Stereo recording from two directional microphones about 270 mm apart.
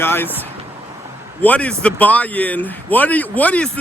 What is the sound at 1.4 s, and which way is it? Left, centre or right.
Speech, centre.